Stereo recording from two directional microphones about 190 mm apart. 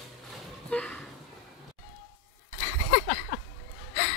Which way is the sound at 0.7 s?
5° left (ahead or behind).